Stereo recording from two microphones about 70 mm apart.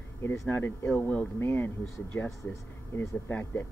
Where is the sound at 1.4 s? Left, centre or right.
Left.